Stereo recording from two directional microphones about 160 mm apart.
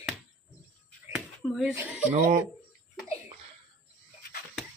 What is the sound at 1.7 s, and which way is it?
Speech, 10° right (ahead or behind).